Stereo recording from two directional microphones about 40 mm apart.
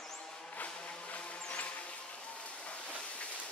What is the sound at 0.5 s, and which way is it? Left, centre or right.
Music, left.